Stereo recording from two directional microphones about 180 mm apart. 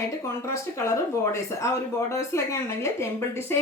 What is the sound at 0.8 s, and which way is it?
A woman's voice, 15° left (ahead or behind).